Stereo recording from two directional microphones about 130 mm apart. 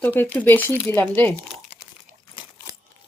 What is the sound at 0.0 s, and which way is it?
Speech, 15° left (ahead or behind).